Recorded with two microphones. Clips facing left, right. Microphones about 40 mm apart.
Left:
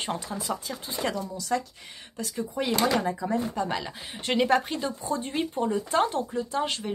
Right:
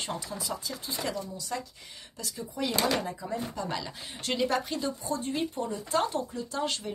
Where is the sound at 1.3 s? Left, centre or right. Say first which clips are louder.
Left 7 dB; left.